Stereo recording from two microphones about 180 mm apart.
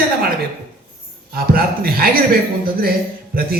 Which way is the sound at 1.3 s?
55° right (ahead or behind).